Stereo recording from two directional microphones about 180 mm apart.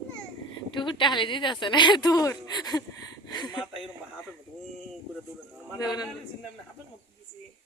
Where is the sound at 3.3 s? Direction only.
20° left (ahead or behind).